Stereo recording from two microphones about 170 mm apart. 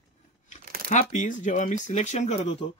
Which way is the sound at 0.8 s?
45° left (ahead or behind).